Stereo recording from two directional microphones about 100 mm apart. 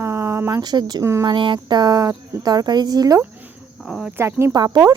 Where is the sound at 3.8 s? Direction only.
Centre (ahead or behind).